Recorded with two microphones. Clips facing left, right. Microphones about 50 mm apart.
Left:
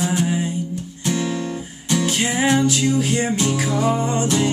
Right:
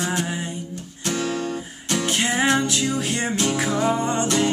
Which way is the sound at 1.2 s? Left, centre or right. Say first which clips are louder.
Left 1 dB; centre.